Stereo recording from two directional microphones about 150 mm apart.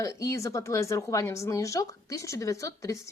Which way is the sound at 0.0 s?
20° left (ahead or behind).